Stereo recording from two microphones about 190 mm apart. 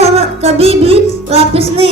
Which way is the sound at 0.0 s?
30° right (ahead or behind).